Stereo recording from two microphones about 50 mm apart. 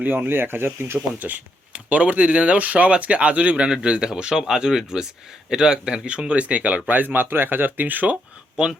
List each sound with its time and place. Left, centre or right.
0.3 s speech: right
0.9 s speech: right